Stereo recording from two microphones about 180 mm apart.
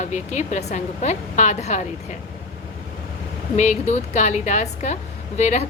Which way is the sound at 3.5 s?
40° left (ahead or behind).